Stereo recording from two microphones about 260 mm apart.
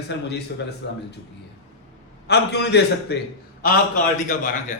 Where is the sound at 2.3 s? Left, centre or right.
Left.